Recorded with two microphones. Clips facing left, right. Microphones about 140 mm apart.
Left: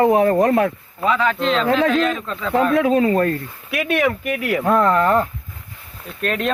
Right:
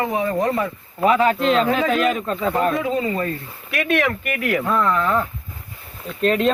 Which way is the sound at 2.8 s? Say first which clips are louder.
Left 6 dB; 65° left (ahead or behind).